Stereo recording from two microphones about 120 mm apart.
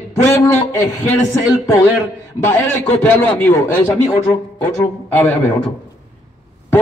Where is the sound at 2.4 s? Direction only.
15° left (ahead or behind).